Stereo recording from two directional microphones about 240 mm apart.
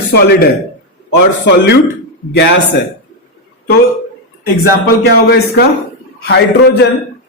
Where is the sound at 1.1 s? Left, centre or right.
Left.